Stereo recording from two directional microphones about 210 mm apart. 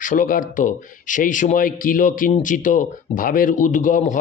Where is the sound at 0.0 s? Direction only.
40° left (ahead or behind).